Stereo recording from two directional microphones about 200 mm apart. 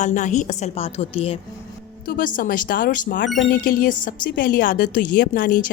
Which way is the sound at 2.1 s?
45° left (ahead or behind).